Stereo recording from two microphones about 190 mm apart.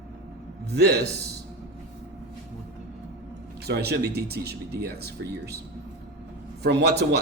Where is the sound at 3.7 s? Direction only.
60° right (ahead or behind).